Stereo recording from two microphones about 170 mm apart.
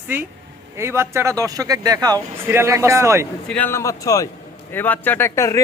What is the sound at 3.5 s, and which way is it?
Speech, 10° left (ahead or behind).